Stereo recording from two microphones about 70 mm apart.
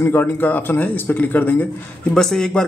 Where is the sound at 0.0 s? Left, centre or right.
Left.